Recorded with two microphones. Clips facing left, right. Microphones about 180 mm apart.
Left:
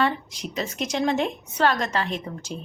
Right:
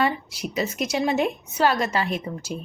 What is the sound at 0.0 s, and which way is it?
A woman's voice, 10° right (ahead or behind).